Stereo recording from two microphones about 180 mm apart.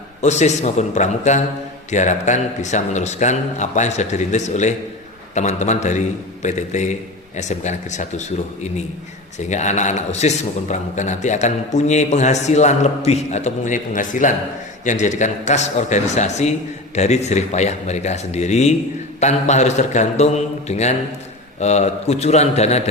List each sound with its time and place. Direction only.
0.2 s a man's voice: 40° left (ahead or behind)